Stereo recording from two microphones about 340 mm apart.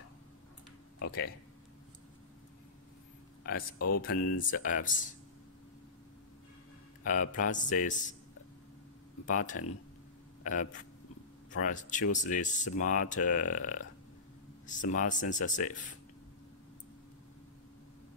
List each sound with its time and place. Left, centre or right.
0.9 s speech: left
3.7 s speech: left
4.4 s speech: left
7.1 s speech: left
9.2 s speech: left